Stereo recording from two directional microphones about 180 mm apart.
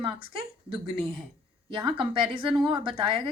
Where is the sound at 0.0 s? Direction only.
30° right (ahead or behind).